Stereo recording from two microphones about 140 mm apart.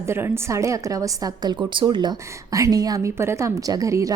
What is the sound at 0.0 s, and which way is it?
A woman's voice, 15° right (ahead or behind).